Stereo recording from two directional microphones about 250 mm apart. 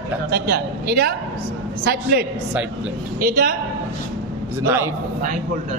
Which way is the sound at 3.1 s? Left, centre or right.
Right.